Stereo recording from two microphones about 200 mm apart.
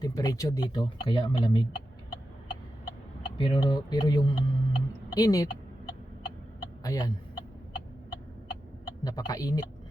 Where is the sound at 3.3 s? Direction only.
25° left (ahead or behind).